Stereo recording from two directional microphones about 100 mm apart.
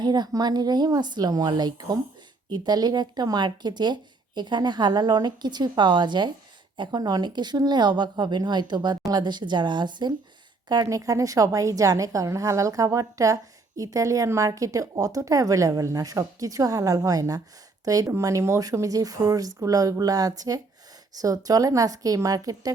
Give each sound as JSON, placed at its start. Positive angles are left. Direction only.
{"t": 0.0, "sound": "a woman's voice", "side_deg": -45}